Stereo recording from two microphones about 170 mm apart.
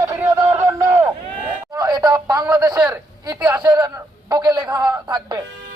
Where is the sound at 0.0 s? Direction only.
20° right (ahead or behind).